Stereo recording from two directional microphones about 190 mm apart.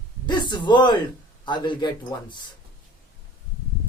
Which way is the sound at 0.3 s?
25° left (ahead or behind).